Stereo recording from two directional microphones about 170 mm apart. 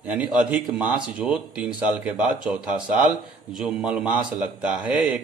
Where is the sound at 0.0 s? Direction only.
10° right (ahead or behind).